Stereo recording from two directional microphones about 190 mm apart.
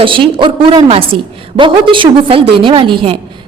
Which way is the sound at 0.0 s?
25° right (ahead or behind).